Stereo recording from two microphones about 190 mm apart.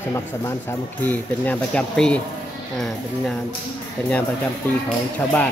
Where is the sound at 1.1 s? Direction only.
5° left (ahead or behind).